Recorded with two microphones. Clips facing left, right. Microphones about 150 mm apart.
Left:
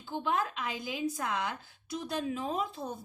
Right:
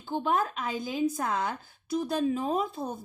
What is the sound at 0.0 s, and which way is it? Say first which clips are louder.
A woman's voice: right 4 dB; 40° right (ahead or behind).